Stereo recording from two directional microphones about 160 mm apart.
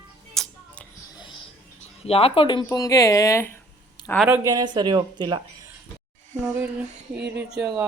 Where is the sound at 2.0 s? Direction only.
35° left (ahead or behind); by 3.5 s 20° left (ahead or behind).